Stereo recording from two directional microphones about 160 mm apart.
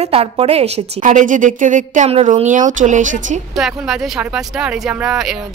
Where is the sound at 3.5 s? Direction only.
Centre (ahead or behind).